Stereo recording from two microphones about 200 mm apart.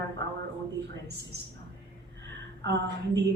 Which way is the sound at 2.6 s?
60° right (ahead or behind).